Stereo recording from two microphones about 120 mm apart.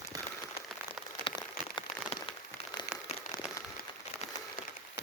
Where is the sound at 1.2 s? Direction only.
40° left (ahead or behind).